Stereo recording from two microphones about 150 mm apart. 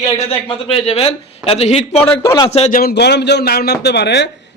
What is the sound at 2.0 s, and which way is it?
Speech, 15° left (ahead or behind).